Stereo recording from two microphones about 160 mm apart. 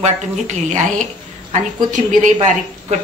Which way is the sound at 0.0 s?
50° right (ahead or behind).